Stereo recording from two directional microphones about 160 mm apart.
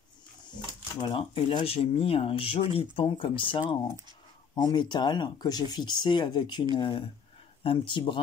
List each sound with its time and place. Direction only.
1.0 s speech: 35° left (ahead or behind)
4.6 s speech: 25° left (ahead or behind)